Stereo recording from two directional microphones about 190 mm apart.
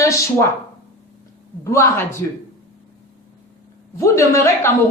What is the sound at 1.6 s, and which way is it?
Speech, 15° left (ahead or behind).